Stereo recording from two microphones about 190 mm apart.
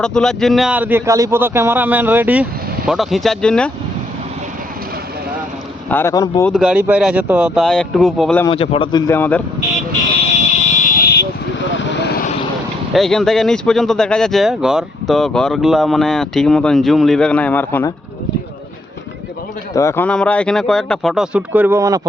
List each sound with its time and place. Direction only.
0.0 s a man's voice: 5° left (ahead or behind)
5.9 s speech: 15° left (ahead or behind)
6.4 s speech: 5° right (ahead or behind)
8.4 s a man's voice: 30° left (ahead or behind); by 9.4 s 10° left (ahead or behind)
10.8 s vehicle: 50° left (ahead or behind)
11.8 s vehicle: 60° left (ahead or behind)
12.9 s speech: centre (ahead or behind)
19.7 s speech: 15° left (ahead or behind); by 22.0 s 15° right (ahead or behind)